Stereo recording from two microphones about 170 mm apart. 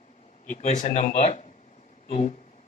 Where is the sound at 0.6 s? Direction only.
45° left (ahead or behind).